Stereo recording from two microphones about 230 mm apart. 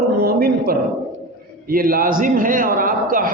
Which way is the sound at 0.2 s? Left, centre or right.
Right.